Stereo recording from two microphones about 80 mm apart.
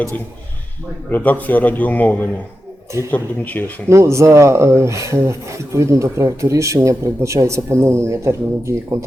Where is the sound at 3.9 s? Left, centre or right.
Right.